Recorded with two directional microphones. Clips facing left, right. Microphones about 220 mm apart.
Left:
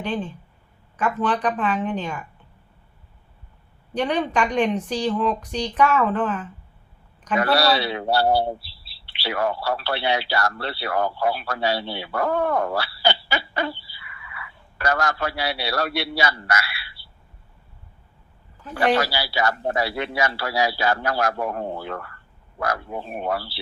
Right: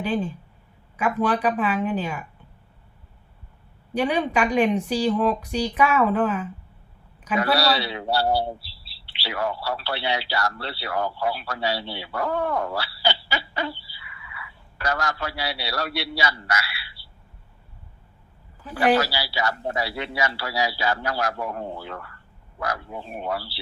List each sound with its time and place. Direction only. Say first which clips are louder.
0.0 s a woman's voice: right 2 dB; 10° right (ahead or behind)
3.9 s a woman's voice: even; 10° right (ahead or behind)
7.5 s a man's voice: left 4 dB; 55° left (ahead or behind)
18.6 s a woman's voice: even; 5° right (ahead or behind)
18.9 s a man's voice: left 1 dB; 55° left (ahead or behind)